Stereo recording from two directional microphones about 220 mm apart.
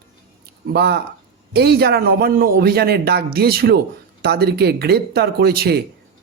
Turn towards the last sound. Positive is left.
turn(degrees=-45)  # may be behind; listen again after turning